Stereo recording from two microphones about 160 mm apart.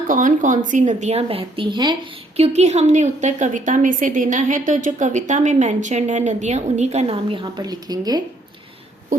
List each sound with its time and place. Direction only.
0.1 s a woman's voice: 55° right (ahead or behind); by 8.2 s 25° right (ahead or behind)